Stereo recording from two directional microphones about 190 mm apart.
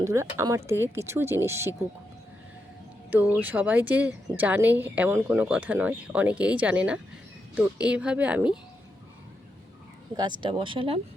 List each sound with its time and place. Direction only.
0.0 s a woman's voice: 15° right (ahead or behind)
3.1 s a woman's voice: 10° right (ahead or behind)
10.2 s speech: 25° right (ahead or behind)